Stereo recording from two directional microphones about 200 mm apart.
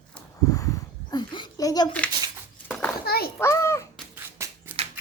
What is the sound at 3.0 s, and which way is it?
Children playing, 50° left (ahead or behind).